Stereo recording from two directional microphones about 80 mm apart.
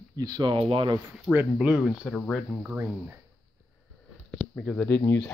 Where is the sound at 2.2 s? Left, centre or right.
Centre.